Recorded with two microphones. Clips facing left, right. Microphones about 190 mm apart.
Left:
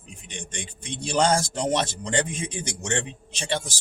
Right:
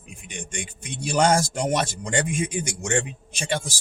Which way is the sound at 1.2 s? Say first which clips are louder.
Right 2 dB; 10° right (ahead or behind).